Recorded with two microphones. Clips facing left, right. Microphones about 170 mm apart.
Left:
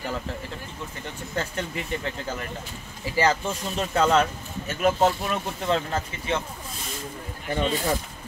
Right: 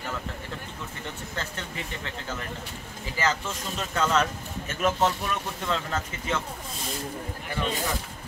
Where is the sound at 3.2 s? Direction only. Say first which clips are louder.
Left 5 dB; 35° left (ahead or behind).